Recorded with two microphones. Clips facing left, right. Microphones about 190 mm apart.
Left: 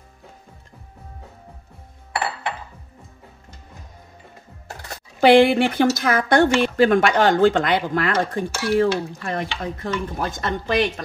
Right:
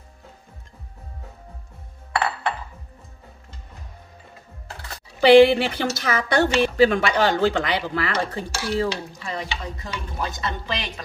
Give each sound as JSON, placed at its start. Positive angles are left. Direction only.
{"t": 4.8, "sound": "speech", "side_deg": 55}